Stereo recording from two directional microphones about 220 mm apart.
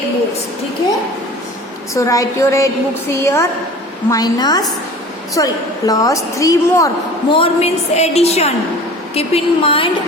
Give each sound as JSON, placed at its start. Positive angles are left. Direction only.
{"t": 1.9, "sound": "a woman's voice", "side_deg": 15}